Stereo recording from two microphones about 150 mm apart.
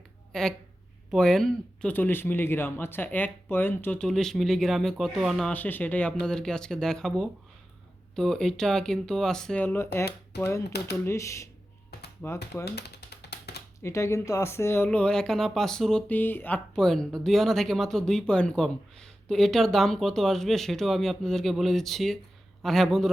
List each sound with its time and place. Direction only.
1.1 s speech: 5° left (ahead or behind)
5.5 s speech: 10° left (ahead or behind)
10.7 s speech: 90° left
11.0 s speech: 20° left (ahead or behind)
12.7 s a sound: 90° left
13.8 s speech: 20° left (ahead or behind); by 23.1 s centre (ahead or behind)